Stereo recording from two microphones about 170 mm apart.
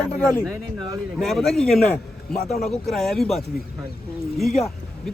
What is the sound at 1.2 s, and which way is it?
A man's voice, centre (ahead or behind).